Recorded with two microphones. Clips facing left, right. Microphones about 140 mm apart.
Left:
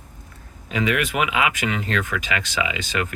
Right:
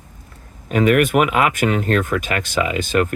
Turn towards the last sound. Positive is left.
turn(degrees=-50)  # may be behind; listen again after turning